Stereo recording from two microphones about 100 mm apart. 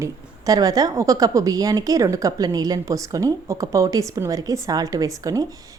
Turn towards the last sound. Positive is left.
turn(degrees=-35)  # may be behind; listen again after turning